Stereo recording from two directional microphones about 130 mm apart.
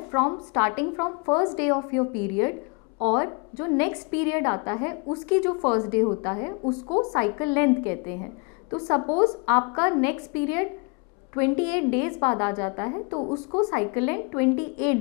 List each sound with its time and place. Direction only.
0.1 s a woman's voice: 25° left (ahead or behind)